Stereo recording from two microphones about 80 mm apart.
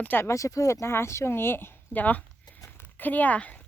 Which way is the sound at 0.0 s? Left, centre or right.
Left.